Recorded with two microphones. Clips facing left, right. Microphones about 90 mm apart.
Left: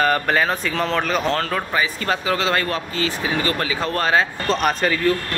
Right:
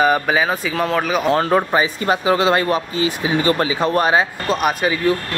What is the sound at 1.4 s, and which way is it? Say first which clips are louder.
Speech: right 6 dB; 25° right (ahead or behind).